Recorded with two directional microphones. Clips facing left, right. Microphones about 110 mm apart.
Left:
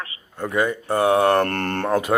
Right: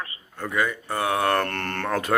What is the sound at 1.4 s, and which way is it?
Speech, 40° left (ahead or behind).